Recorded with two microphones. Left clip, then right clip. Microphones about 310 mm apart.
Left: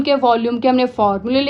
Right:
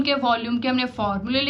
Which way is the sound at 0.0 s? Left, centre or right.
Centre.